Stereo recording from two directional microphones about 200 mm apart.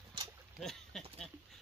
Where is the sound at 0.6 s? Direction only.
Centre (ahead or behind).